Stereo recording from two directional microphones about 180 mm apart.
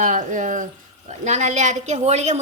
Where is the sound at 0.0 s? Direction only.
45° right (ahead or behind).